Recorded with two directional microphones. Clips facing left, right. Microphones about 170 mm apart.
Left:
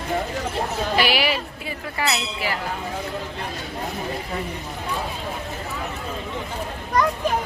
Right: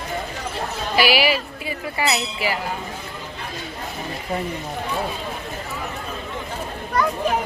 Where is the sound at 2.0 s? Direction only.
10° right (ahead or behind).